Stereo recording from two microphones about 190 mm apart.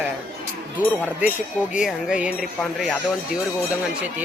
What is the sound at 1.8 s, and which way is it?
Speech, 5° right (ahead or behind).